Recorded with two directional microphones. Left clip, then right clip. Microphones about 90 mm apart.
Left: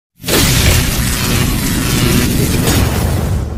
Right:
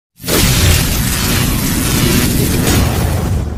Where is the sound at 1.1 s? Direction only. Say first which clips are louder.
Even; centre (ahead or behind).